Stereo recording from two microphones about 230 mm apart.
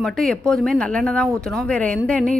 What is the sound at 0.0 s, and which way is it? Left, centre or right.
A woman's voice, centre.